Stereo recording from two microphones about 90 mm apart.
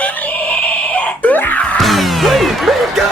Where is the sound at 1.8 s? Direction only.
Centre (ahead or behind).